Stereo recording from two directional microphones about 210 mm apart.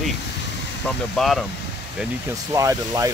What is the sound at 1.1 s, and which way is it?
Speech, centre (ahead or behind).